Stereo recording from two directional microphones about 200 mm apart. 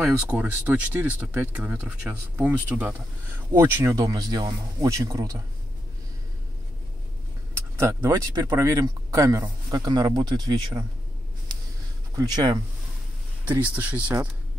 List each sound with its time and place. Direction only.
0.0 s speech: 5° right (ahead or behind)
7.5 s speech: 15° right (ahead or behind)
12.2 s speech: 20° right (ahead or behind)
13.5 s speech: 5° right (ahead or behind)